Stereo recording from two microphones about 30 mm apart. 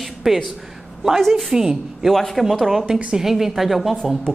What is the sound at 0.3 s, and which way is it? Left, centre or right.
Speech, centre.